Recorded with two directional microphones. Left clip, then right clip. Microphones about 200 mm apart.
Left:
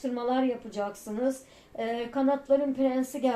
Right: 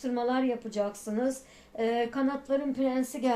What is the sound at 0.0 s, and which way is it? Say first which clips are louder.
Speech: left 1 dB; 40° right (ahead or behind).